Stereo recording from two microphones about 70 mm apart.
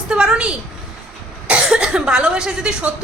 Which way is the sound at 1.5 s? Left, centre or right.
Centre.